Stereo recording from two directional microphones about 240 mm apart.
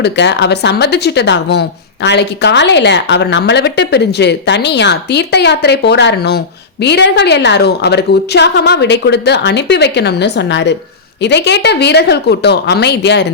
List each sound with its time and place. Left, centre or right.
0.0 s speech: left